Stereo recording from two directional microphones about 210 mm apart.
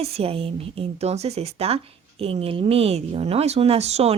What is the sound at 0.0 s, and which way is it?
Speech, 30° right (ahead or behind).